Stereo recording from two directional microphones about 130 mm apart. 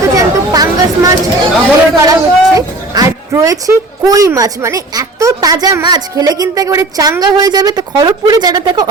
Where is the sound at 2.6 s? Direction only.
30° right (ahead or behind).